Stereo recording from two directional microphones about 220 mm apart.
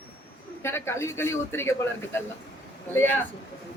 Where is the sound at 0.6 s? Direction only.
10° left (ahead or behind).